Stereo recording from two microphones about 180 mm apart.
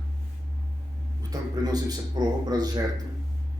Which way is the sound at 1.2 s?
20° right (ahead or behind).